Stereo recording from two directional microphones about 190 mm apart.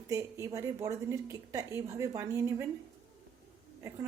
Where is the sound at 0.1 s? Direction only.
15° right (ahead or behind).